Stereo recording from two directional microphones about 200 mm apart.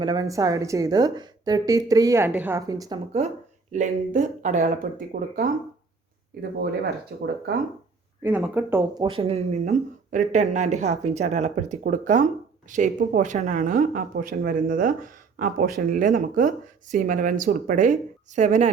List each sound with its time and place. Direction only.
0.0 s a woman's voice: 20° right (ahead or behind)
3.7 s speech: 40° right (ahead or behind)
6.6 s speech: 55° right (ahead or behind)
8.2 s a woman's voice: 10° right (ahead or behind)
9.0 s speech: 25° right (ahead or behind)